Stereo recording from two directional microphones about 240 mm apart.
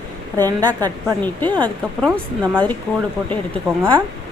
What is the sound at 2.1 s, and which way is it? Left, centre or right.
Speech, centre.